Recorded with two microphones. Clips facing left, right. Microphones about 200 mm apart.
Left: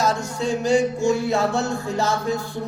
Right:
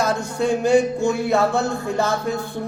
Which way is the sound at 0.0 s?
55° right (ahead or behind).